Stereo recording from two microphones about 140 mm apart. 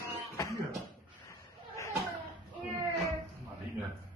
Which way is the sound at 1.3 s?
20° left (ahead or behind).